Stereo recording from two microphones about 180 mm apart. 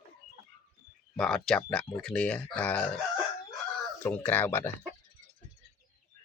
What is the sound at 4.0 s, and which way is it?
Speech, 10° left (ahead or behind).